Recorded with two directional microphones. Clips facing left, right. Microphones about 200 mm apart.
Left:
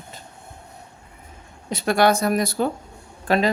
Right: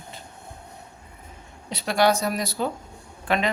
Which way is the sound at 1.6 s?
50° left (ahead or behind).